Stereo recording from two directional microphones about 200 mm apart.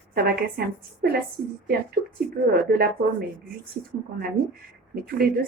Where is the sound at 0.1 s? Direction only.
50° right (ahead or behind).